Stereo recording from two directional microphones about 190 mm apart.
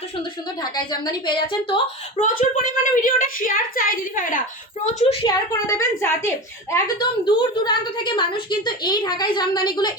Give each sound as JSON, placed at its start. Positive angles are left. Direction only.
{"t": 0.9, "sound": "a woman's voice", "side_deg": 25}
{"t": 2.2, "sound": "a woman's voice", "side_deg": 45}
{"t": 5.2, "sound": "a woman's voice", "side_deg": 15}